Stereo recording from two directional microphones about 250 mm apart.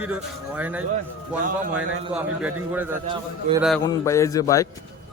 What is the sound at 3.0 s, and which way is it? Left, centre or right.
Speech, right.